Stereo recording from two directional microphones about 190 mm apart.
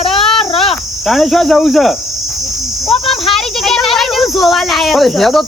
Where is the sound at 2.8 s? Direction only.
30° left (ahead or behind).